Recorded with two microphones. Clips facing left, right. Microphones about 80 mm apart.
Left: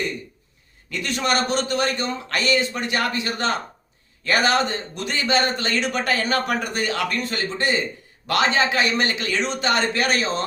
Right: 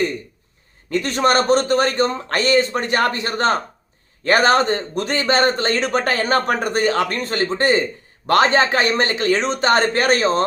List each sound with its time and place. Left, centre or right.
0.9 s a man's voice: right